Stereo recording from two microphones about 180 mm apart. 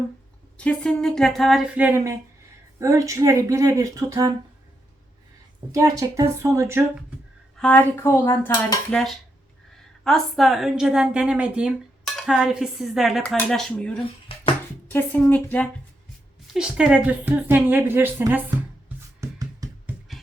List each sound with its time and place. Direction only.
0.5 s a woman's voice: 5° left (ahead or behind); by 4.3 s 20° right (ahead or behind)
5.7 s a woman's voice: 20° right (ahead or behind)
7.6 s speech: 10° left (ahead or behind)
10.0 s a woman's voice: centre (ahead or behind)
16.5 s a woman's voice: 5° right (ahead or behind)
19.2 s music: 20° right (ahead or behind)